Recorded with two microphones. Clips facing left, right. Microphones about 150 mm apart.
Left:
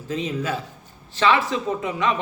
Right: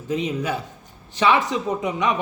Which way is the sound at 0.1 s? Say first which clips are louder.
Right 2 dB; 15° right (ahead or behind).